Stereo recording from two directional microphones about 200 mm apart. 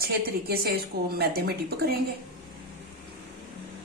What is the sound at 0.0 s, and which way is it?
A woman's voice, 50° right (ahead or behind).